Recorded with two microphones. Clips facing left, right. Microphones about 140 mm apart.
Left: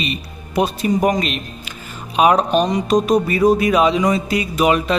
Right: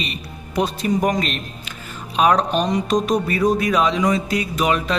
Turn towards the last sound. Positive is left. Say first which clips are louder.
# left 4 dB
turn(degrees=5)  # may be behind; listen again after turning